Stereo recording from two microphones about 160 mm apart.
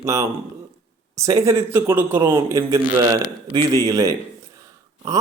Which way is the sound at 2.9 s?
35° right (ahead or behind).